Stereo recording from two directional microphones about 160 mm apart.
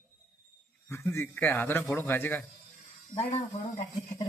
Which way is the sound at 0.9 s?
15° left (ahead or behind).